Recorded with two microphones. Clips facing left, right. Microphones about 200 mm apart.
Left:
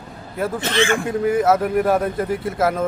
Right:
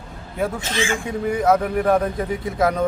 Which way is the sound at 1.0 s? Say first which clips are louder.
Right 1 dB; 5° left (ahead or behind).